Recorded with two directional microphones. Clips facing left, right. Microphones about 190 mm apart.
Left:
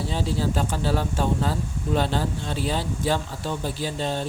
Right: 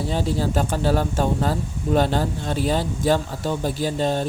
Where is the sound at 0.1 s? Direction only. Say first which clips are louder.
Right 3 dB; 45° right (ahead or behind).